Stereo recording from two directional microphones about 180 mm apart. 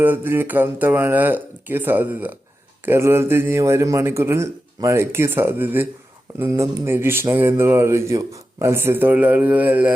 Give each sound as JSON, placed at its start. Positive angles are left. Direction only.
{"t": 0.0, "sound": "speech", "side_deg": -10}